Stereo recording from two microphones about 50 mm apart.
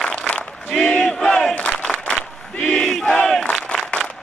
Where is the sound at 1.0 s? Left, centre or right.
Centre.